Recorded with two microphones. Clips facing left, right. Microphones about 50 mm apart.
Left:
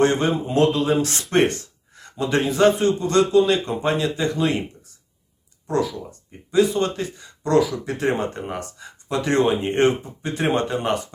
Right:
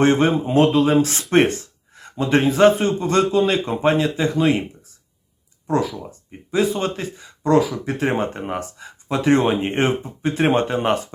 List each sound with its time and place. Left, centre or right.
0.0 s speech: right
1.2 s speech: centre
1.5 s a man's voice: right
6.5 s speech: right